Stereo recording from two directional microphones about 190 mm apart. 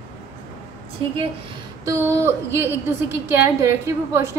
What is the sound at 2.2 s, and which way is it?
A woman's voice, 15° right (ahead or behind).